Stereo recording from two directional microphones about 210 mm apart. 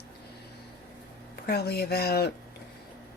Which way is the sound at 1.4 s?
50° left (ahead or behind).